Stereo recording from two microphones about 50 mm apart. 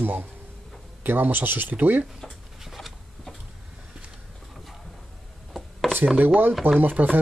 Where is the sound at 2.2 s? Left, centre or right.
Centre.